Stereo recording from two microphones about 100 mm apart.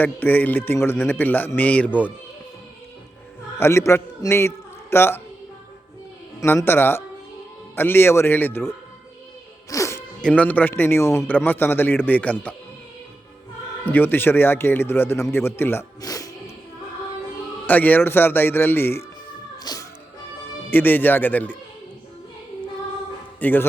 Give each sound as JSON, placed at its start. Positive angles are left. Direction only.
{"t": 0.0, "sound": "a man's voice", "side_deg": 20}
{"t": 3.6, "sound": "a man's voice", "side_deg": 25}
{"t": 6.7, "sound": "a man's voice", "side_deg": 20}
{"t": 9.6, "sound": "music", "side_deg": 30}
{"t": 10.2, "sound": "a man's voice", "side_deg": 10}
{"t": 13.9, "sound": "a man's voice", "side_deg": 20}
{"t": 16.0, "sound": "music", "side_deg": 40}
{"t": 17.7, "sound": "a man's voice", "side_deg": 20}
{"t": 19.6, "sound": "music", "side_deg": 35}
{"t": 20.7, "sound": "a man's voice", "side_deg": 20}
{"t": 23.4, "sound": "a man's voice", "side_deg": 20}